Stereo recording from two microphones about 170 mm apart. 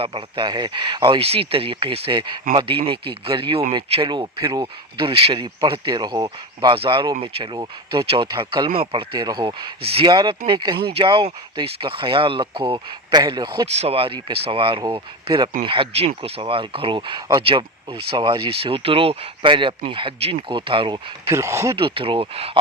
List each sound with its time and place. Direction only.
0.0 s speech: 30° right (ahead or behind)
21.8 s speech: 30° right (ahead or behind)